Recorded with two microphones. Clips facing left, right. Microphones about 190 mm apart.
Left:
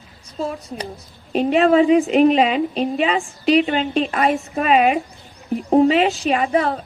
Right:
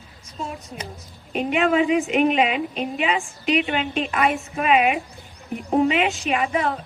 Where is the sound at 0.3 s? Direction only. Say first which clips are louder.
Left 6 dB; 35° left (ahead or behind).